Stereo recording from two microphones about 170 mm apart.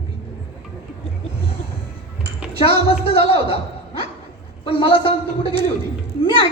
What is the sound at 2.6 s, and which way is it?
Speech, 35° left (ahead or behind).